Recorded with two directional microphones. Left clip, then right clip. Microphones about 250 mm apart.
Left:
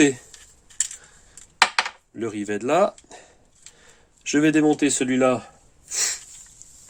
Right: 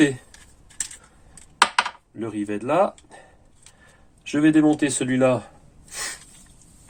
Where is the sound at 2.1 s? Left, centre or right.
Left.